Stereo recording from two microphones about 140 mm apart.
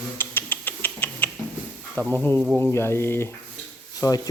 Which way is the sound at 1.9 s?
10° left (ahead or behind).